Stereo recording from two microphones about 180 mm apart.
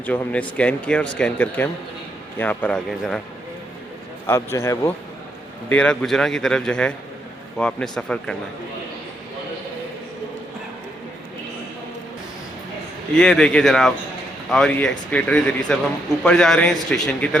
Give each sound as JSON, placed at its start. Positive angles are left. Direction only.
{"t": 0.0, "sound": "speech", "side_deg": 10}
{"t": 4.5, "sound": "a man's voice", "side_deg": 15}
{"t": 13.1, "sound": "a man's voice", "side_deg": 5}